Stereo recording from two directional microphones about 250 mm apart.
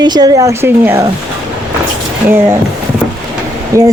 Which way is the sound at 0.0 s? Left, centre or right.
Centre.